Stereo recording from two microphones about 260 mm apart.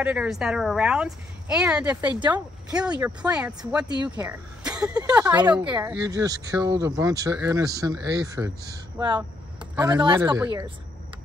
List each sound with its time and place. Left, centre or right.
0.0 s speech: centre
2.0 s speech: centre
2.3 s speech: centre